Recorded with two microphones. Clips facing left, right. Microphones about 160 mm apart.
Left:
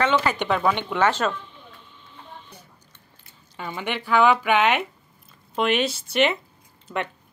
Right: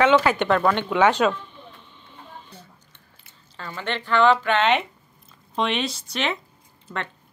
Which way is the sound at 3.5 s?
15° left (ahead or behind).